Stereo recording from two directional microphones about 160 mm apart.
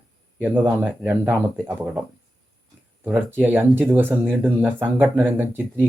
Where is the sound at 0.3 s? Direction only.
10° right (ahead or behind).